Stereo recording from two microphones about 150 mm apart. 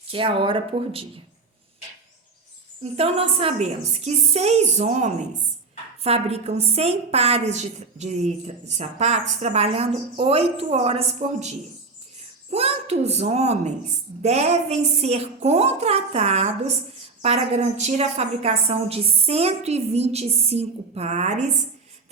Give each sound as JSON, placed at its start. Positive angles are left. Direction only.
{"t": 0.1, "sound": "speech", "side_deg": -35}
{"t": 2.8, "sound": "a woman's voice", "side_deg": -40}